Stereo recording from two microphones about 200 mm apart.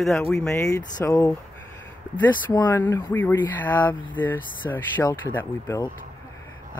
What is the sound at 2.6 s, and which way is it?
Speech, 10° left (ahead or behind).